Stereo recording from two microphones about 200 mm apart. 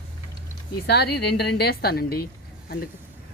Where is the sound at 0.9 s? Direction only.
55° left (ahead or behind).